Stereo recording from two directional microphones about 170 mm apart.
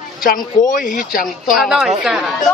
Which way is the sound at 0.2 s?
55° left (ahead or behind).